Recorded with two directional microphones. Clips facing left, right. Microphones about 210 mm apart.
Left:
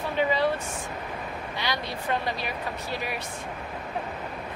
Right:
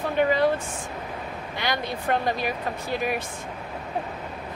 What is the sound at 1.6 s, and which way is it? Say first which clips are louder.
Speech: right 4 dB; 50° right (ahead or behind).